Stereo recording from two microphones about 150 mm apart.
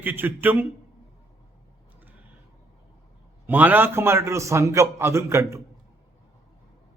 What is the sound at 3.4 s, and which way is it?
A man's voice, 10° right (ahead or behind).